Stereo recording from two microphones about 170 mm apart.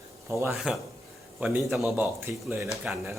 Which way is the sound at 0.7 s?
5° right (ahead or behind).